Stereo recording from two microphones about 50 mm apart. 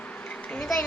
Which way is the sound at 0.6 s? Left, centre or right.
Centre.